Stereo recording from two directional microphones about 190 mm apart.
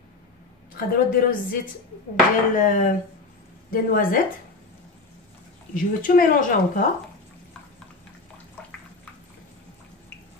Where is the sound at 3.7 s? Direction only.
50° left (ahead or behind).